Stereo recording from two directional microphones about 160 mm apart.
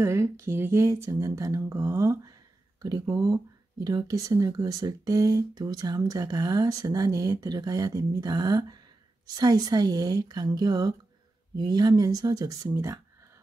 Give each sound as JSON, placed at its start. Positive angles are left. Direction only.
{"t": 0.0, "sound": "speech", "side_deg": -15}